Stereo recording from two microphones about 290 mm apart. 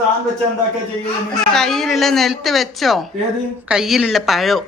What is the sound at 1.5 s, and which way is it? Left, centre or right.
Speech, centre.